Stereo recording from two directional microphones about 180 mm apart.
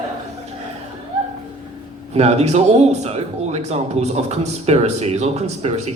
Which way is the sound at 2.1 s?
35° right (ahead or behind).